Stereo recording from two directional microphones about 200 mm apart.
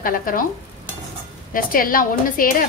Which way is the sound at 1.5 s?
45° left (ahead or behind).